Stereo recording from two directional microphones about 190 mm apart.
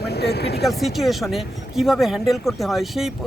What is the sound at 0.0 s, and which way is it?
Speech, 60° left (ahead or behind).